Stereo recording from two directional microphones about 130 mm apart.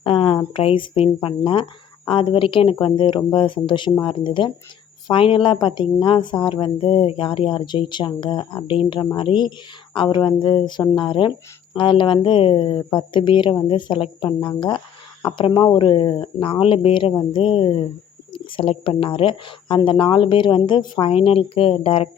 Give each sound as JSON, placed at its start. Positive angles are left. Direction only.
{"t": 0.0, "sound": "a woman's voice", "side_deg": 45}